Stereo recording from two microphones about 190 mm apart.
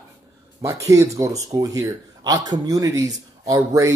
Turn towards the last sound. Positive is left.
turn(degrees=-15)  # may be behind; listen again after turning